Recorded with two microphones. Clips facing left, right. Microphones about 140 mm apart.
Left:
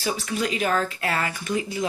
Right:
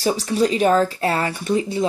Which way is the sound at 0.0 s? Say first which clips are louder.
Right 7 dB; 35° right (ahead or behind).